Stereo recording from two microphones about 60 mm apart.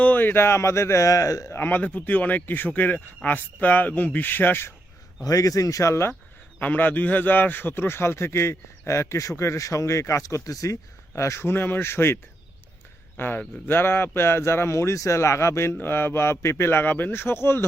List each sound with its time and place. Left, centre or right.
0.0 s speech: left
1.5 s speech: left
5.2 s speech: left
6.6 s speech: left
11.5 s speech: left